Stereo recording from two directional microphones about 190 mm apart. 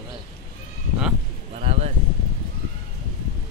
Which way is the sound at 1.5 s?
35° right (ahead or behind).